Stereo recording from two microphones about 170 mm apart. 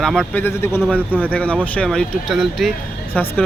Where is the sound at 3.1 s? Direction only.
10° left (ahead or behind).